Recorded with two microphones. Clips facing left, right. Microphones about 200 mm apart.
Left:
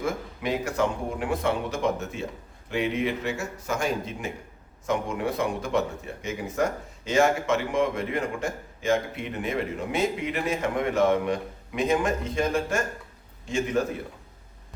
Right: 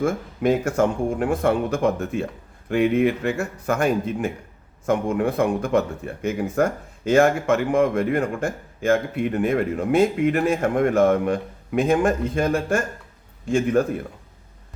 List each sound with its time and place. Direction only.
0.0 s speech: 50° right (ahead or behind)